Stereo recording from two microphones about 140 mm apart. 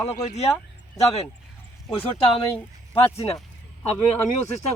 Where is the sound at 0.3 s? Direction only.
50° left (ahead or behind).